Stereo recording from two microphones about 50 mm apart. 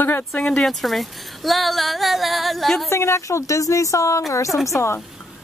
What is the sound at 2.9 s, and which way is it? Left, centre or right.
Speech, left.